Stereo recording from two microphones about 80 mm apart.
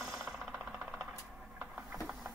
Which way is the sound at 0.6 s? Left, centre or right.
Centre.